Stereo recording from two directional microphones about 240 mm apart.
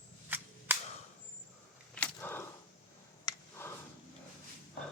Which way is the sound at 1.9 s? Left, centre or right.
Centre.